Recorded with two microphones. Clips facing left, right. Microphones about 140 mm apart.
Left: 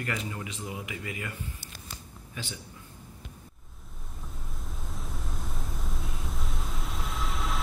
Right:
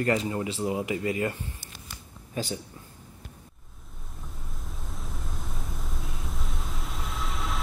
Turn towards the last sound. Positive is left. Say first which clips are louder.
# even
turn(degrees=0)  # may be behind; listen again after turning